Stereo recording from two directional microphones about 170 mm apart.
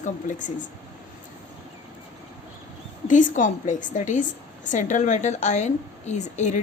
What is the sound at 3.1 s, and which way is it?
A woman's voice, 50° left (ahead or behind).